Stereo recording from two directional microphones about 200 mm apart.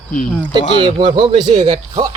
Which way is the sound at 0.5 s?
25° right (ahead or behind).